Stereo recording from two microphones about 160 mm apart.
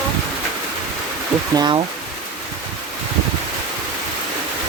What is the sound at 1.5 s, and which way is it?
Speech, 30° right (ahead or behind).